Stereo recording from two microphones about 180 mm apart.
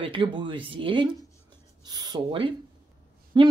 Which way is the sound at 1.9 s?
25° right (ahead or behind).